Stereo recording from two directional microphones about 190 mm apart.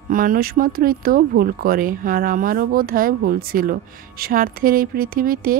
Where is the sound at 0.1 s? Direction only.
45° right (ahead or behind).